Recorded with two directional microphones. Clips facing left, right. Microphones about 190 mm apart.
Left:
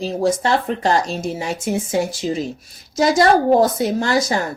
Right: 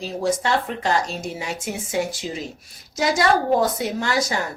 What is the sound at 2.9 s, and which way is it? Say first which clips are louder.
Speech: left 5 dB; 35° left (ahead or behind).